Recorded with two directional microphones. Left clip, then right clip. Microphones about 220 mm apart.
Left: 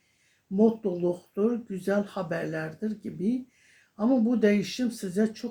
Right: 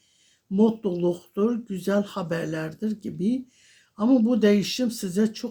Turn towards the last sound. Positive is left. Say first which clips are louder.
# right 2 dB
turn(degrees=-45)  # may be behind; listen again after turning